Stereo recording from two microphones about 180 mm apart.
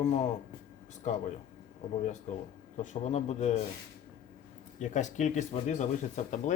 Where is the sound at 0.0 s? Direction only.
40° left (ahead or behind).